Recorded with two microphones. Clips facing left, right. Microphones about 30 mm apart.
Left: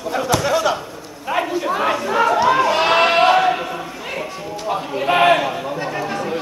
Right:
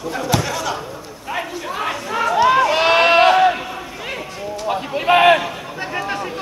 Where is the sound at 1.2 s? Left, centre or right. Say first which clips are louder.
Left 6 dB; centre.